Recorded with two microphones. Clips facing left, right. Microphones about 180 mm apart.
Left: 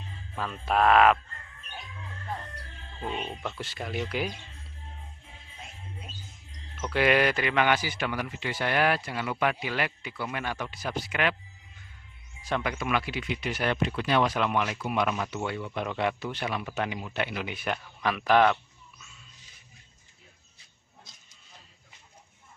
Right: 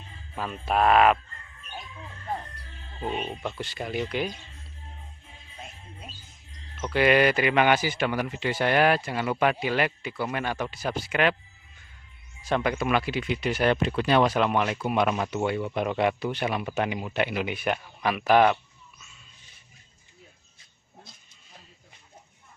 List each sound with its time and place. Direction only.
0.4 s speech: 5° right (ahead or behind)
3.3 s speech: 5° right (ahead or behind)
6.8 s speech: centre (ahead or behind)
7.5 s speech: 20° right (ahead or behind)
9.0 s speech: 40° right (ahead or behind)
12.4 s speech: 35° right (ahead or behind)
15.3 s speech: 15° right (ahead or behind)